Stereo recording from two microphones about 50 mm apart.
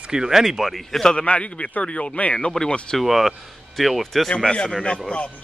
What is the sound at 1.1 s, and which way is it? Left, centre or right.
A man's voice, left.